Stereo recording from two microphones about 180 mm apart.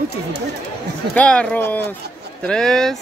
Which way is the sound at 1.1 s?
5° left (ahead or behind).